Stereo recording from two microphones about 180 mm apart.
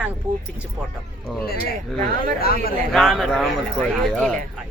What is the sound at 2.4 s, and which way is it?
Speech, 55° left (ahead or behind).